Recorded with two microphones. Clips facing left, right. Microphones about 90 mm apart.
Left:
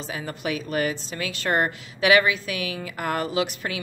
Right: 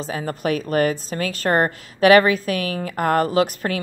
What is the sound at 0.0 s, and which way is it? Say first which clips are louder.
A woman's voice: right 6 dB; 40° right (ahead or behind).